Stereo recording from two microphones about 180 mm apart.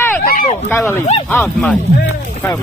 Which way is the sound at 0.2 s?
55° left (ahead or behind).